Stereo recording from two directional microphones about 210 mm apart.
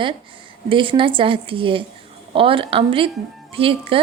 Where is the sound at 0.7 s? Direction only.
25° right (ahead or behind).